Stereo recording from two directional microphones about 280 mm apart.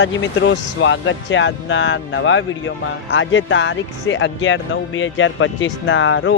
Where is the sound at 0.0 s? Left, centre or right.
Left.